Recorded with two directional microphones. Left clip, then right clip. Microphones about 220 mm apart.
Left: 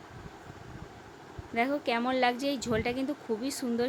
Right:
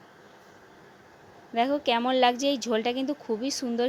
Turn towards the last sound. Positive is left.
turn(degrees=-20)  # may be behind; listen again after turning